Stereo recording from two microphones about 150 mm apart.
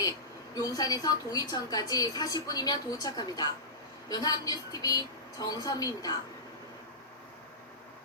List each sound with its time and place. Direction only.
0.5 s a woman's voice: 25° left (ahead or behind)